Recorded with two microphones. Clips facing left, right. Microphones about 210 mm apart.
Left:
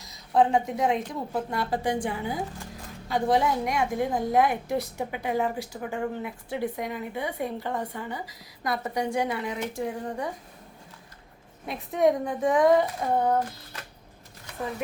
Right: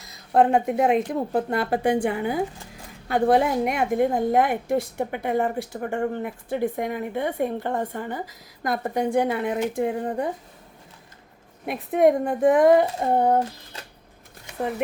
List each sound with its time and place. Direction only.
0.0 s a woman's voice: 60° right (ahead or behind)
11.6 s a woman's voice: 60° right (ahead or behind)
12.8 s a sound: 30° right (ahead or behind)